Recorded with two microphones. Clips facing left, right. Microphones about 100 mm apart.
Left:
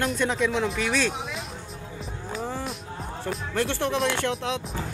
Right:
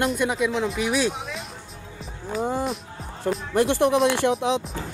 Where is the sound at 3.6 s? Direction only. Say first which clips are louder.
Right 7 dB; 15° right (ahead or behind).